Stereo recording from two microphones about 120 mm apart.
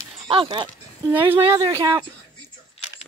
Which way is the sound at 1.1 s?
15° right (ahead or behind).